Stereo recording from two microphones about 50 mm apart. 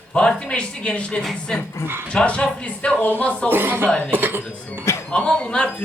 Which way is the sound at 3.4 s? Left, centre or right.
Right.